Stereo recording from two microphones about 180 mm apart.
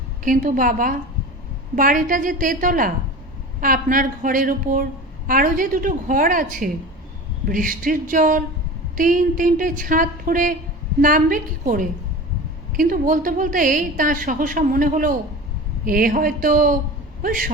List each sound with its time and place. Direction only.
0.3 s a woman's voice: 50° right (ahead or behind)